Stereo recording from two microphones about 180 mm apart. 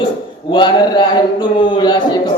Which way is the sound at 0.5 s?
25° left (ahead or behind).